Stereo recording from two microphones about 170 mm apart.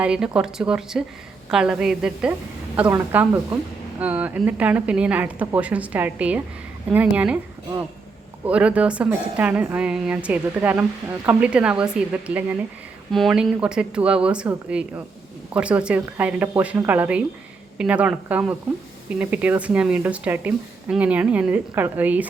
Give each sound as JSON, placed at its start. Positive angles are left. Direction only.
{"t": 0.0, "sound": "speech", "side_deg": -5}
{"t": 8.4, "sound": "speech", "side_deg": -5}